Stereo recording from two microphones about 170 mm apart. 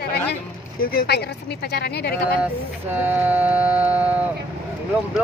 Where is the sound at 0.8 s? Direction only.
60° left (ahead or behind).